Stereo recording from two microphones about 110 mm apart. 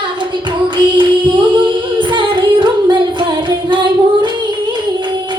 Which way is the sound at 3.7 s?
45° right (ahead or behind).